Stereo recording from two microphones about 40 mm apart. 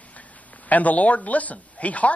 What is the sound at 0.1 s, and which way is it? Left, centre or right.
Speech, left.